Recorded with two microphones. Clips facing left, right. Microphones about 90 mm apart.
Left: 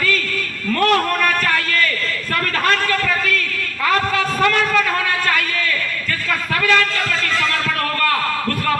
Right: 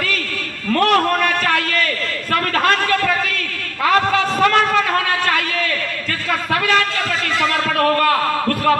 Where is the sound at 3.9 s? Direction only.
25° right (ahead or behind).